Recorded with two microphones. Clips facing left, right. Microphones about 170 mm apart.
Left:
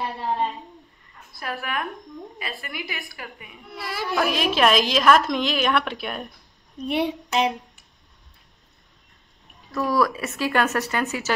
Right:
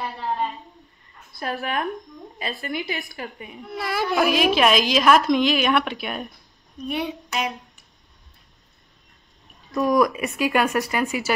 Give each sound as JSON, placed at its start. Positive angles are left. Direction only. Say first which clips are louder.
{"t": 1.4, "sound": "a woman's voice", "louder": "right 3 dB", "side_deg": -30}
{"t": 3.7, "sound": "speech", "louder": "right 6 dB", "side_deg": -50}
{"t": 4.1, "sound": "a woman's voice", "louder": "right 3 dB", "side_deg": -5}
{"t": 6.9, "sound": "child singing", "louder": "left 4 dB", "side_deg": 30}
{"t": 9.7, "sound": "speech", "louder": "right 3 dB", "side_deg": -15}